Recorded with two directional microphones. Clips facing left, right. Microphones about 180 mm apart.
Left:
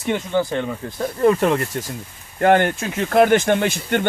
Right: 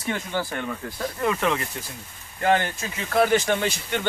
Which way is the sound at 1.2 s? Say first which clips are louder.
Left 8 dB; 40° left (ahead or behind).